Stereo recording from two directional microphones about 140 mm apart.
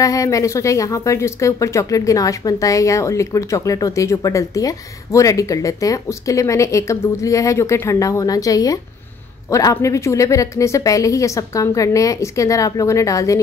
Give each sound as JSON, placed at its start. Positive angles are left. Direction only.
{"t": 0.0, "sound": "speech", "side_deg": 25}